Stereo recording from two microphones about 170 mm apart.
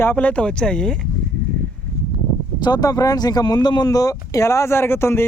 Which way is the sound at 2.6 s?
25° left (ahead or behind).